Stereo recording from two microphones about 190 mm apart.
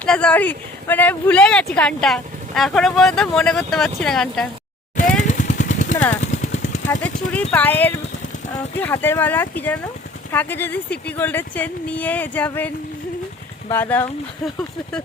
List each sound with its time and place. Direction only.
0.0 s speech: 5° left (ahead or behind)
5.3 s vehicle: 40° left (ahead or behind)
6.8 s speech: 5° left (ahead or behind)